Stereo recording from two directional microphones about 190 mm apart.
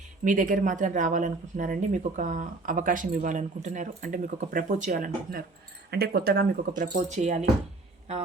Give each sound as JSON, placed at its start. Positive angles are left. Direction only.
{"t": 0.3, "sound": "speech", "side_deg": -45}
{"t": 7.2, "sound": "speech", "side_deg": -40}